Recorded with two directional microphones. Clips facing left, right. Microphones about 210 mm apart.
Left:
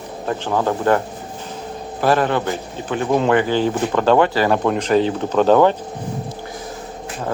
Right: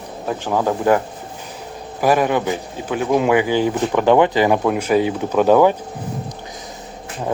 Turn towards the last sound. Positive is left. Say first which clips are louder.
# even
turn(degrees=-10)  # may be behind; listen again after turning